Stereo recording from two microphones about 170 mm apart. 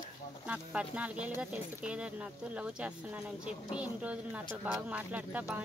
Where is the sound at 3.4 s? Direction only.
5° right (ahead or behind).